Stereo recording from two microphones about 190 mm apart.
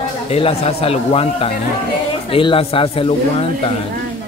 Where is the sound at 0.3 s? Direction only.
30° left (ahead or behind).